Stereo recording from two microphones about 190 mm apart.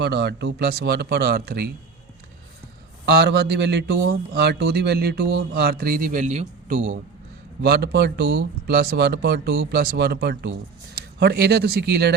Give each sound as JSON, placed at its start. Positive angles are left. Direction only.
{"t": 0.0, "sound": "a man's voice", "side_deg": -60}
{"t": 3.2, "sound": "a man's voice", "side_deg": -60}
{"t": 7.6, "sound": "a man's voice", "side_deg": -55}